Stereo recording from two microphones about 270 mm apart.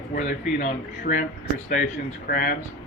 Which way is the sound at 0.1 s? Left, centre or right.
Left.